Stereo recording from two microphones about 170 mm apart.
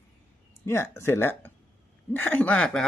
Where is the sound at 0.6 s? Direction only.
15° left (ahead or behind).